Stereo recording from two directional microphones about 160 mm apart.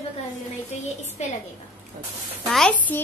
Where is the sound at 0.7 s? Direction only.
45° left (ahead or behind).